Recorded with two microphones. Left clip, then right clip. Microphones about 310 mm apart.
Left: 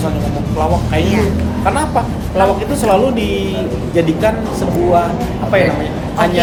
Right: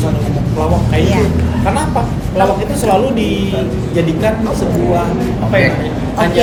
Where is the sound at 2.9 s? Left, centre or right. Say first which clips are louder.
Even; centre.